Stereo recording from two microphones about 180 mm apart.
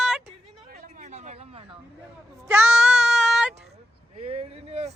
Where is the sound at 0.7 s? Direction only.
45° right (ahead or behind).